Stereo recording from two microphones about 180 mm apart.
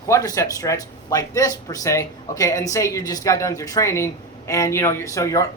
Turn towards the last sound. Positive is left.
turn(degrees=15)  # may be behind; listen again after turning